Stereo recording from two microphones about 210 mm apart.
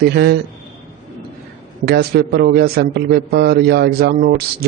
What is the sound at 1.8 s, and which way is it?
A man's voice, 50° right (ahead or behind).